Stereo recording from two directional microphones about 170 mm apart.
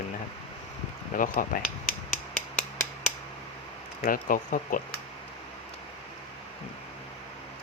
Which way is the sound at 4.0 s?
55° left (ahead or behind).